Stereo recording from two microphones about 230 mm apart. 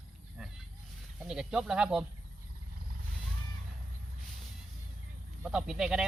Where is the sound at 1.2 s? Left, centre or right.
Centre.